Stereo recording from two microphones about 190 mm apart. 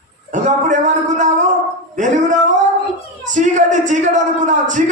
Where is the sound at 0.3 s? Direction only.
40° right (ahead or behind).